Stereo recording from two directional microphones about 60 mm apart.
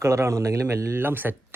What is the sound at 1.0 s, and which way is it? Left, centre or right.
Speech, right.